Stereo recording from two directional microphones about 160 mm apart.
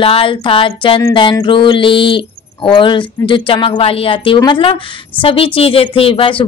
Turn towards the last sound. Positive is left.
turn(degrees=35)  # may be behind; listen again after turning